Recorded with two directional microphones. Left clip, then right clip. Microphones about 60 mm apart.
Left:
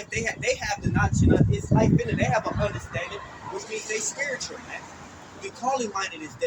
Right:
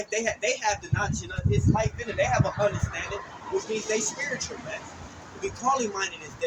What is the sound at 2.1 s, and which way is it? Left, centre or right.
Speech, right.